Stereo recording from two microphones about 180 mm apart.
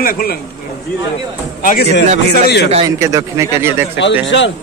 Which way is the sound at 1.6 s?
50° left (ahead or behind).